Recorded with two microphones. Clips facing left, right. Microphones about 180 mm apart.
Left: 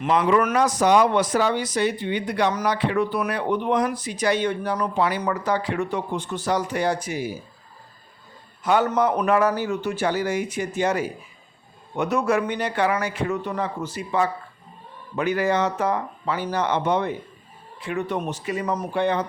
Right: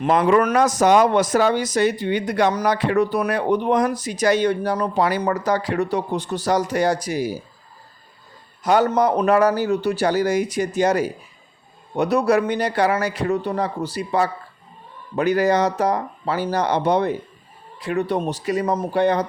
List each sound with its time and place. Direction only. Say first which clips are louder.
0.0 s speech: right 3 dB; 45° right (ahead or behind)
8.6 s speech: right 3 dB; 40° right (ahead or behind)